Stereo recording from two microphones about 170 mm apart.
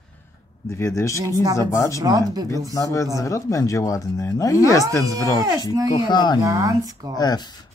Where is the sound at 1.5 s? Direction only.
20° left (ahead or behind).